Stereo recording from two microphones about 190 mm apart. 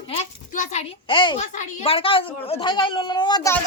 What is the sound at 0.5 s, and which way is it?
A woman's voice, 40° left (ahead or behind).